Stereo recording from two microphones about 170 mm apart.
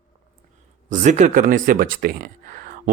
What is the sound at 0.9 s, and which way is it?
Speech, 45° right (ahead or behind).